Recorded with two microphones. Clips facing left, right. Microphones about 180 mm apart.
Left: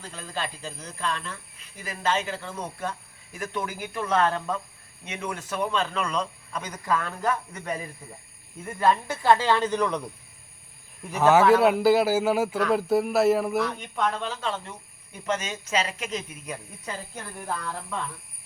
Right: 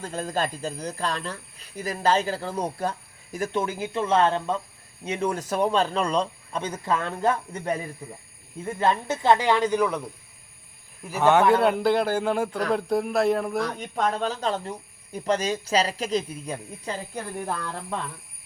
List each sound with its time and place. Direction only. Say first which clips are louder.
0.0 s speech: right 7 dB; 45° right (ahead or behind); by 10.0 s 10° right (ahead or behind)
11.1 s a man's voice: left 1 dB; centre (ahead or behind)
13.7 s speech: right 2 dB; 40° right (ahead or behind)